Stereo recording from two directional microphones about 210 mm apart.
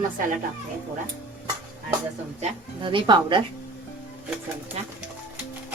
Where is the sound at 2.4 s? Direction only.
25° right (ahead or behind).